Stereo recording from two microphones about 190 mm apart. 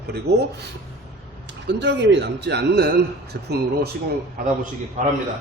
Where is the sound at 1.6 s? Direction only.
65° right (ahead or behind).